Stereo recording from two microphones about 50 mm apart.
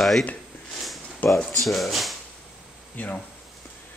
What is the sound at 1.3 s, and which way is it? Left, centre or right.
Speech, centre.